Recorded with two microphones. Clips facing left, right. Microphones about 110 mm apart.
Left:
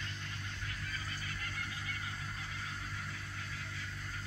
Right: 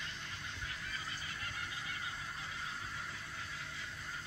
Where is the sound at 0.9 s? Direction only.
20° right (ahead or behind).